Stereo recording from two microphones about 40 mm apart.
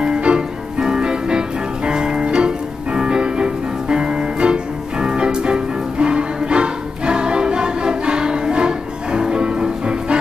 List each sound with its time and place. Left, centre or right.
0.0 s music: right